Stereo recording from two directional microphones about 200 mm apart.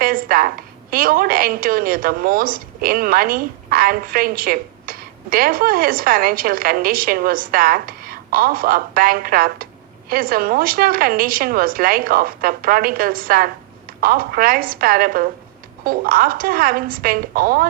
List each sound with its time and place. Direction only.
0.0 s a woman's voice: 45° right (ahead or behind)